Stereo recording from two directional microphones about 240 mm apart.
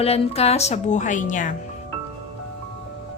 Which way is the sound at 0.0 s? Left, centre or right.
Left.